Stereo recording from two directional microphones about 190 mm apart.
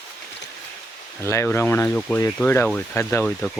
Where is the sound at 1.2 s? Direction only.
15° left (ahead or behind).